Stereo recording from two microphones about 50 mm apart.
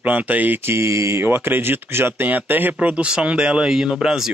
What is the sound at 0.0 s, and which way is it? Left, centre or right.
Speech, right.